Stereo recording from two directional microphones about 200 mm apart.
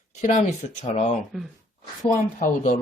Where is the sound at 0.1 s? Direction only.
40° left (ahead or behind).